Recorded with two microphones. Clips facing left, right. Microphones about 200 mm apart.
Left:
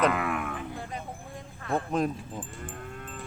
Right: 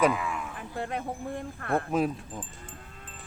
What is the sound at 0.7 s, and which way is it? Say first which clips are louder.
Speech: right 5 dB; 65° right (ahead or behind).